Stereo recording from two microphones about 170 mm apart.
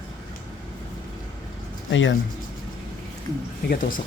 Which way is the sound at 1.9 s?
90° left.